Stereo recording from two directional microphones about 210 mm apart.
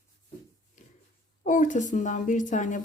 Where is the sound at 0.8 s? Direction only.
35° left (ahead or behind).